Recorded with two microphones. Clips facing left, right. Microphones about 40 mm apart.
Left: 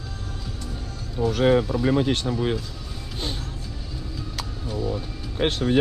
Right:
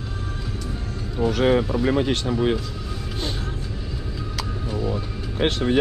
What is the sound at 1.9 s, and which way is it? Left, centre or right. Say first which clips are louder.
Speech: even; right.